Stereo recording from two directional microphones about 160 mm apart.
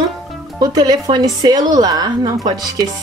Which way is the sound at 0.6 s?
25° right (ahead or behind).